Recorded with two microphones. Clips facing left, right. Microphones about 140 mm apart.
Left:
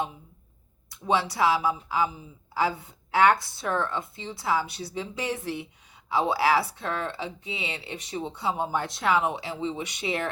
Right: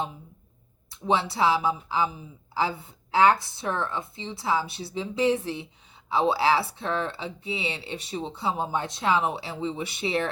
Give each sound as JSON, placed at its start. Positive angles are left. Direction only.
{"t": 0.9, "sound": "speech", "side_deg": -25}